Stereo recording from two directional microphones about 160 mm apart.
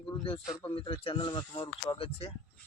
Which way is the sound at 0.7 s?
35° left (ahead or behind).